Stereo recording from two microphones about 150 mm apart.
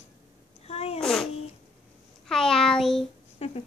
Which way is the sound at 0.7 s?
40° left (ahead or behind).